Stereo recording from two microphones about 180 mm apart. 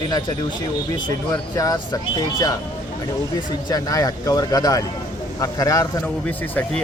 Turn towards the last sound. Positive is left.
turn(degrees=10)  # may be behind; listen again after turning